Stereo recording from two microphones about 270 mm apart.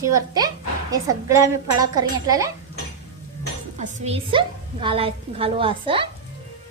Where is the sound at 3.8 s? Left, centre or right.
Right.